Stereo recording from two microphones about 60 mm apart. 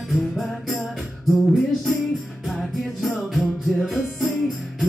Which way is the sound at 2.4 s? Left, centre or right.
Centre.